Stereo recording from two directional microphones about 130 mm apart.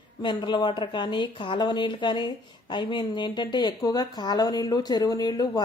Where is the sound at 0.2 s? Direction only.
35° left (ahead or behind).